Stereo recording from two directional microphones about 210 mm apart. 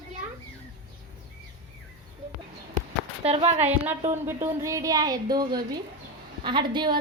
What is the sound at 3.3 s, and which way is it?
Speech, 30° right (ahead or behind).